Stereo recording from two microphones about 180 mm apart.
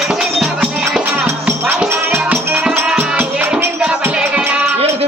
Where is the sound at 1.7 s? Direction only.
10° right (ahead or behind).